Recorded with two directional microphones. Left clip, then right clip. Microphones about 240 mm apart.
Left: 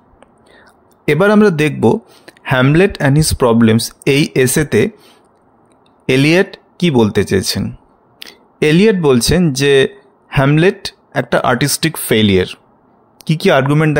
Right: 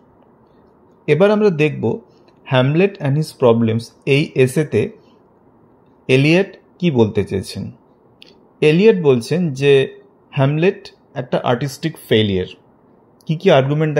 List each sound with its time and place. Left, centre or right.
1.0 s speech: left
8.2 s a sound: left
9.0 s speech: left